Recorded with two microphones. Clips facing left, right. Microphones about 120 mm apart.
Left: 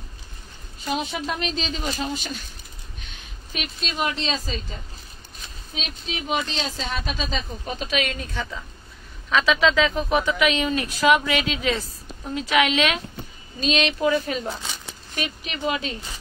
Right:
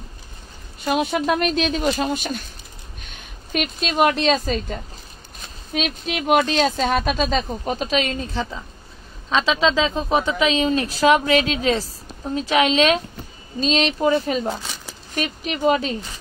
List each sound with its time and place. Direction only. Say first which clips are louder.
0.7 s a woman's voice: right 6 dB; 65° right (ahead or behind)
5.7 s speech: right 9 dB; 65° right (ahead or behind); by 14.5 s 40° right (ahead or behind)
14.6 s a sound: right 1 dB; centre (ahead or behind)
15.1 s speech: right 5 dB; 40° right (ahead or behind)